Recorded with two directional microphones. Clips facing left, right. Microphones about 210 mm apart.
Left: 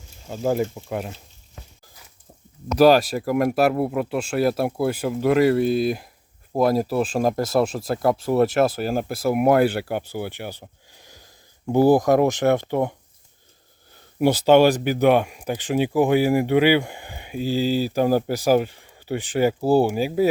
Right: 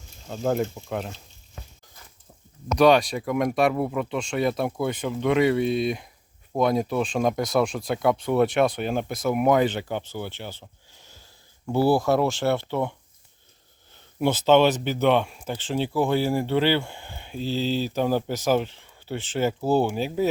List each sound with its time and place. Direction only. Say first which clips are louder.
0.3 s speech: left 2 dB; 5° left (ahead or behind)
2.7 s speech: left 3 dB; 5° left (ahead or behind)
11.6 s speech: left 5 dB; 15° left (ahead or behind)
14.2 s speech: left 3 dB; 10° left (ahead or behind)